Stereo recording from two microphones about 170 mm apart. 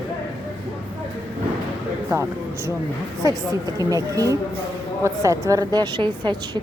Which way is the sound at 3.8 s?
20° right (ahead or behind).